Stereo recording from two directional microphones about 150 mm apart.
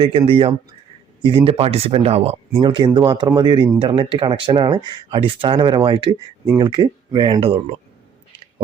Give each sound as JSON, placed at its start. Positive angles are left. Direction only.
{"t": 0.3, "sound": "speech", "side_deg": -35}
{"t": 2.6, "sound": "speech", "side_deg": -30}